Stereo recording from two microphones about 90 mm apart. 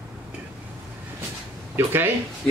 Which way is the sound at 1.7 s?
25° right (ahead or behind).